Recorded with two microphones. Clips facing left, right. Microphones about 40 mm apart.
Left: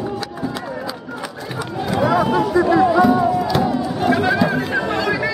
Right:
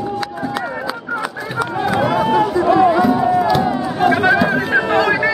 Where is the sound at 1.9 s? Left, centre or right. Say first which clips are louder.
Even; centre.